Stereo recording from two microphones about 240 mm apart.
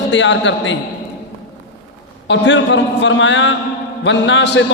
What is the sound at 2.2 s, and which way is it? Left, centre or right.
A man's voice, left.